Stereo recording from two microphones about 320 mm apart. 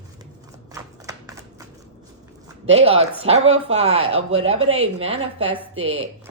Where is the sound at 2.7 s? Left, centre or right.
Centre.